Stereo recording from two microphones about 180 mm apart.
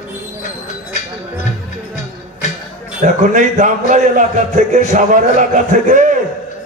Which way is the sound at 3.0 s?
45° right (ahead or behind).